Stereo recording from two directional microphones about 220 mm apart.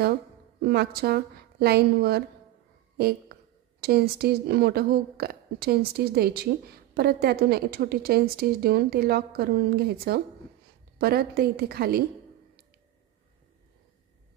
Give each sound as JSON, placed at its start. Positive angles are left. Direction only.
{"t": 0.6, "sound": "a woman's voice", "side_deg": -50}
{"t": 3.8, "sound": "a woman's voice", "side_deg": -45}